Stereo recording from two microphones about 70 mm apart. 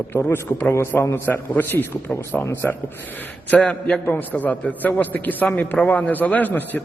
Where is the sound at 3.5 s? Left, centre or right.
Centre.